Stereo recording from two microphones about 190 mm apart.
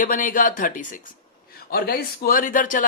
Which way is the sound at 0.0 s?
45° left (ahead or behind).